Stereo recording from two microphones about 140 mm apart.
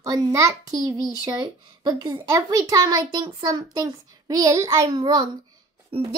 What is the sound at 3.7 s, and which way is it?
A child's voice, 25° right (ahead or behind).